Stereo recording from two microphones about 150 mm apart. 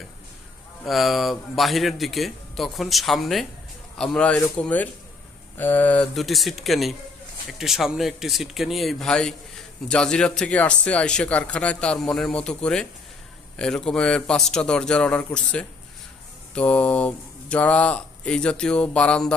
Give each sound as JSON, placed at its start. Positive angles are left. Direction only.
{"t": 0.9, "sound": "speech", "side_deg": 0}